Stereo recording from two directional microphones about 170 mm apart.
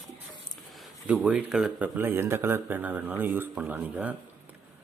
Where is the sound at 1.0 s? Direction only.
5° right (ahead or behind).